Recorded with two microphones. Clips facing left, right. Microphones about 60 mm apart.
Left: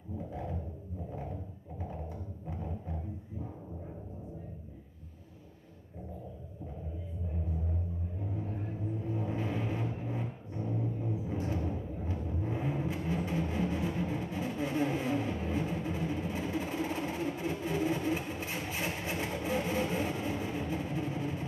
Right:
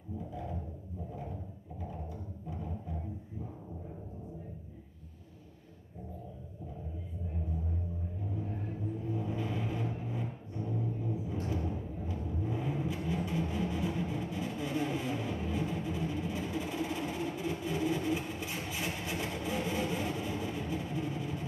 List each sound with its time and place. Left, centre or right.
9.1 s vehicle: left
10.0 s a sound: left
11.7 s vehicle: left